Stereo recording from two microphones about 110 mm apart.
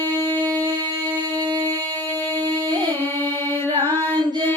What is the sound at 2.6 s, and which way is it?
Music, 45° right (ahead or behind).